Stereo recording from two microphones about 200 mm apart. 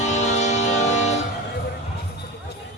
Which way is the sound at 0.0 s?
35° left (ahead or behind).